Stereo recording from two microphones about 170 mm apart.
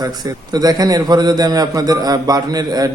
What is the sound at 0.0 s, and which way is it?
A man's voice, 20° right (ahead or behind).